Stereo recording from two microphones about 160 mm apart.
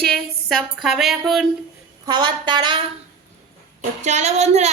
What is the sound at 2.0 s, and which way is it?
Speech, 30° right (ahead or behind).